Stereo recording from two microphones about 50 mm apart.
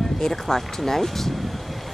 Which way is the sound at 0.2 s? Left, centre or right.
Centre.